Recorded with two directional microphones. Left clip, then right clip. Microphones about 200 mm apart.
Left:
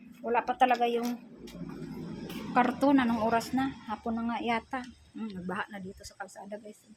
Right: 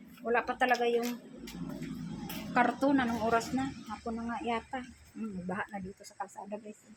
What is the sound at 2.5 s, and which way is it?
A woman's voice, 15° left (ahead or behind).